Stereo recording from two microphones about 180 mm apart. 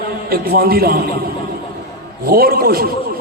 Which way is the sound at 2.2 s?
55° right (ahead or behind).